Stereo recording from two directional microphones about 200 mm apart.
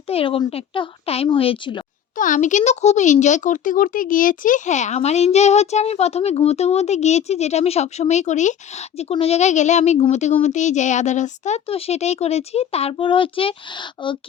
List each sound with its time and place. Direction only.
0.1 s a woman's voice: 30° left (ahead or behind)
2.1 s speech: 40° left (ahead or behind); by 14.2 s 25° left (ahead or behind)